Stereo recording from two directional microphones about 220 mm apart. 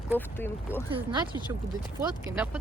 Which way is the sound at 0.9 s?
25° right (ahead or behind).